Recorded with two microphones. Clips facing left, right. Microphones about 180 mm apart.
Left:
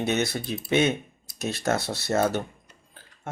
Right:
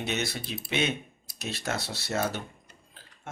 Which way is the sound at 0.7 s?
50° left (ahead or behind).